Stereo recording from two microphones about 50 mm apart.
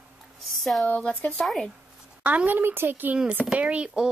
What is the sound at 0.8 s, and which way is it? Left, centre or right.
Speech, left.